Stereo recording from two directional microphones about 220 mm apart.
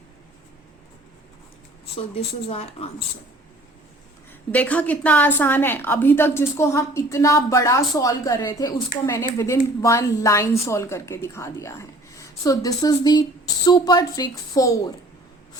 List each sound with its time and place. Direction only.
2.0 s a woman's voice: 25° left (ahead or behind)
4.3 s a woman's voice: 5° left (ahead or behind)